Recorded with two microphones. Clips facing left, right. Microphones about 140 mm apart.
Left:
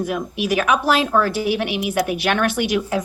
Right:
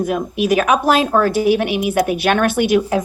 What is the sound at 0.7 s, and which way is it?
Speech, 45° right (ahead or behind).